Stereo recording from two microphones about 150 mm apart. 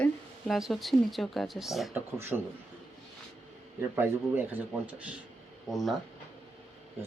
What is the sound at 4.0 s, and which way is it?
Speech, 10° right (ahead or behind).